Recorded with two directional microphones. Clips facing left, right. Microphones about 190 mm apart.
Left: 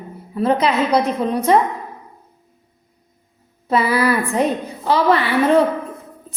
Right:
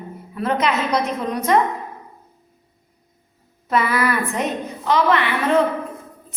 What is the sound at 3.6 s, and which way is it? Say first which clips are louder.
A woman's voice: left 3 dB; 30° left (ahead or behind).